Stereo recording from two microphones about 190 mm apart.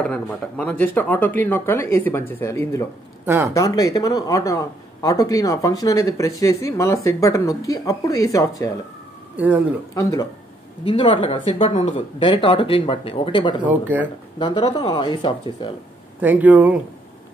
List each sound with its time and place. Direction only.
0.0 s speech: 10° left (ahead or behind)
9.4 s speech: 10° right (ahead or behind)
10.8 s speech: 25° left (ahead or behind)
16.2 s speech: 10° right (ahead or behind)